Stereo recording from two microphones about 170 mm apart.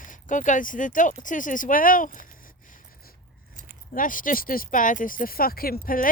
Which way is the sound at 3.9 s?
50° left (ahead or behind).